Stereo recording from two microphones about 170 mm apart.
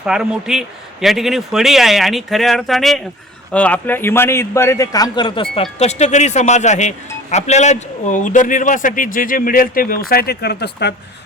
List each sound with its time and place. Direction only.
0.0 s a man's voice: 5° right (ahead or behind); by 5.6 s 30° left (ahead or behind)
5.8 s a man's voice: 40° left (ahead or behind); by 10.9 s 75° left (ahead or behind)